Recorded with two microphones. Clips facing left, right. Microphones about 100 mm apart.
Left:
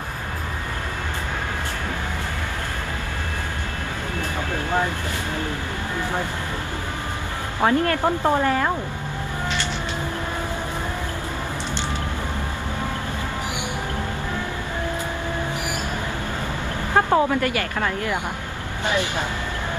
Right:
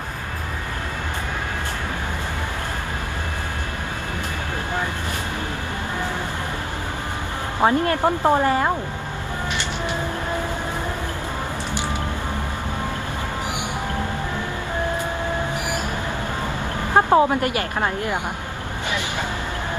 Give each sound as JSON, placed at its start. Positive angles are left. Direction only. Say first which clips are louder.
{"t": 7.6, "sound": "a woman's voice", "louder": "right 1 dB", "side_deg": -25}
{"t": 16.9, "sound": "speech", "louder": "right 3 dB", "side_deg": -20}